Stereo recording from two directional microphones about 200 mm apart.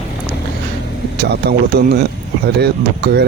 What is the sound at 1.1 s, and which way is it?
Speech, 55° right (ahead or behind).